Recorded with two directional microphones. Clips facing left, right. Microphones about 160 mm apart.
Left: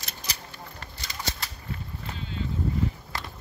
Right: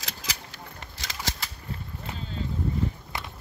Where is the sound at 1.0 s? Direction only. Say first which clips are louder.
Right 1 dB; 90° right.